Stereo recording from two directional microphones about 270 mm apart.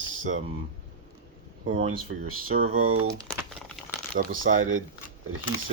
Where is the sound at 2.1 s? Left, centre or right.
Right.